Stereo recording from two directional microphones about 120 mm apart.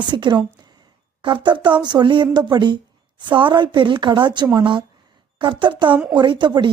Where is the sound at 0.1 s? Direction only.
40° right (ahead or behind).